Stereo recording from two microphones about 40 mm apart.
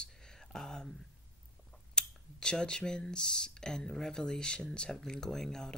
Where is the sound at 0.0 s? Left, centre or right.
Centre.